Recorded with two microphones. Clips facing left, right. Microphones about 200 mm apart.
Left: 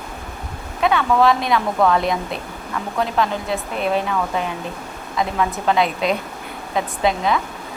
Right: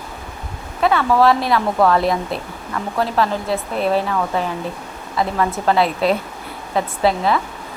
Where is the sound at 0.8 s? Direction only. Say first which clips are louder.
Right 1 dB; 5° right (ahead or behind).